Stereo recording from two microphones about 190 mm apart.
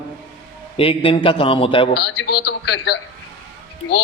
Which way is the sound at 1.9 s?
65° left (ahead or behind).